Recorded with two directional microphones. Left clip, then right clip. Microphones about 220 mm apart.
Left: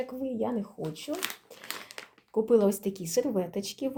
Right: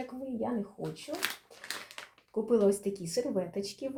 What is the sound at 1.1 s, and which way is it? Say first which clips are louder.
Speech: left 4 dB; 40° left (ahead or behind).